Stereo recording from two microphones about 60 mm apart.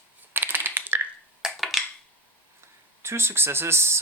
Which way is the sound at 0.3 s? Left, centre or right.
Right.